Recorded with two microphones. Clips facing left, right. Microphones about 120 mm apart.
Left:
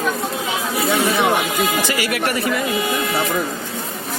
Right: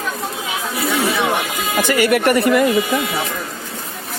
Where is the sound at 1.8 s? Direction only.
50° right (ahead or behind).